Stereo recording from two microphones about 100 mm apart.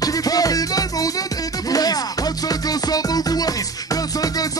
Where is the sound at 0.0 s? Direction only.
40° left (ahead or behind).